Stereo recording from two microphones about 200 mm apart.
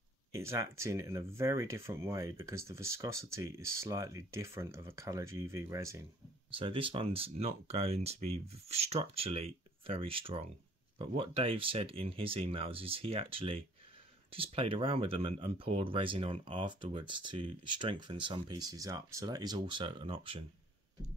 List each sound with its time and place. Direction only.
0.3 s speech: 15° right (ahead or behind)
6.6 s speech: 25° right (ahead or behind)